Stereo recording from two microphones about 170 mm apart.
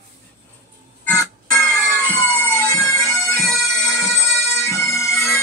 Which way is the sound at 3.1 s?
Centre (ahead or behind).